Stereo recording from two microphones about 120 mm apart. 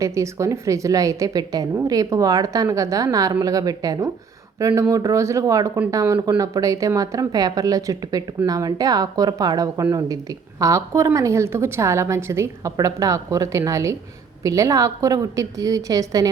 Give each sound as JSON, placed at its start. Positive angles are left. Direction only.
{"t": 0.0, "sound": "speech", "side_deg": -25}